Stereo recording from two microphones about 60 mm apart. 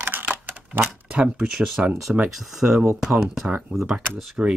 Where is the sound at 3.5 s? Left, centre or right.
Right.